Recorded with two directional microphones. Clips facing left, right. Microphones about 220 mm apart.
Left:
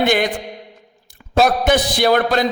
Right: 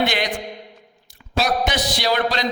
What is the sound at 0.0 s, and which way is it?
Speech, 50° left (ahead or behind).